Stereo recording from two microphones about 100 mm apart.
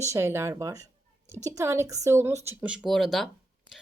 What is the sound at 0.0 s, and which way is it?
A woman's voice, 30° right (ahead or behind).